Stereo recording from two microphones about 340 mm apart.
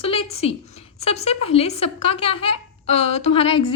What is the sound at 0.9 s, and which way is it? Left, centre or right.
A woman's voice, centre.